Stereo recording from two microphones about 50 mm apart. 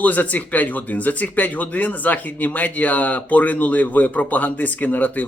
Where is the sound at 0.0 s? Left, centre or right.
Left.